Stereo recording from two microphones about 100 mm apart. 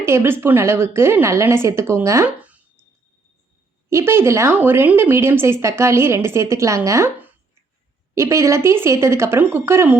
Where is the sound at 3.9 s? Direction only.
25° right (ahead or behind).